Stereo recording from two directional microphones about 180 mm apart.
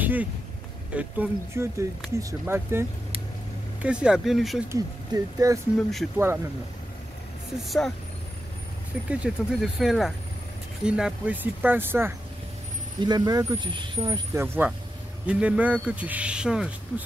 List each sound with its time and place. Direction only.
0.0 s a sound: 10° right (ahead or behind)
0.9 s speech: 10° right (ahead or behind)
4.6 s speech: 20° right (ahead or behind)
7.6 s speech: centre (ahead or behind)
9.1 s speech: 5° right (ahead or behind)
13.0 s speech: 20° right (ahead or behind); by 17.0 s 5° right (ahead or behind)